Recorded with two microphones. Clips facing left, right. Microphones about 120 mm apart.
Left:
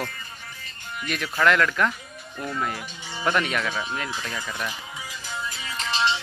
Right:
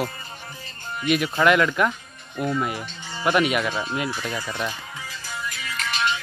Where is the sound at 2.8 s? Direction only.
10° left (ahead or behind).